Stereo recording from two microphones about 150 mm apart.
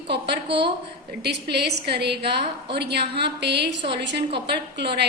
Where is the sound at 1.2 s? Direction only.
90° right.